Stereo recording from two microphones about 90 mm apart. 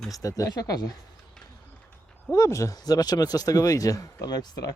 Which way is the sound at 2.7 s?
45° left (ahead or behind).